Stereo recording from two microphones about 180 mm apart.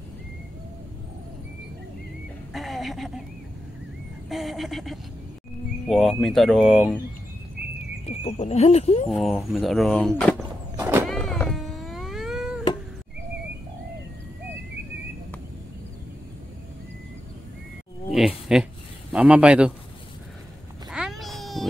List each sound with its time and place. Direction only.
2.5 s a sound: centre (ahead or behind)
4.3 s speech: centre (ahead or behind)
8.1 s speech: 35° left (ahead or behind)
9.1 s speech: centre (ahead or behind)
10.8 s vehicle: 15° right (ahead or behind)
11.1 s cat: centre (ahead or behind)
18.1 s a sound: centre (ahead or behind)
19.1 s speech: 5° right (ahead or behind)
20.9 s a sound: centre (ahead or behind)